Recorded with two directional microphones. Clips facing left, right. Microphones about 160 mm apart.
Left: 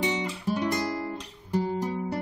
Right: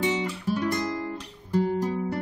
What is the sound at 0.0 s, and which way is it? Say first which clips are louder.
Guitar: right 2 dB; 20° left (ahead or behind).